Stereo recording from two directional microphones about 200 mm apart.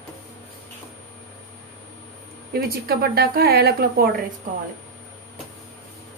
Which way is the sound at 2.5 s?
50° right (ahead or behind).